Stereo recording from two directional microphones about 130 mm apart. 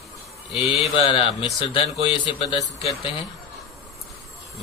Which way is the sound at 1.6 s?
45° left (ahead or behind).